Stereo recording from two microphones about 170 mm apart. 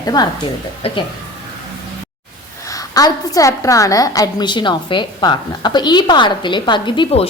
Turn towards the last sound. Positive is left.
turn(degrees=30)  # may be behind; listen again after turning